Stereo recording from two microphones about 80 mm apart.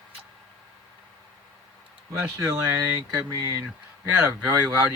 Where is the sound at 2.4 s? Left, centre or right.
Right.